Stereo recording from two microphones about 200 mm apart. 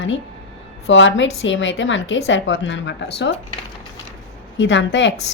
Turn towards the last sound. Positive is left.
turn(degrees=65)  # may be behind; listen again after turning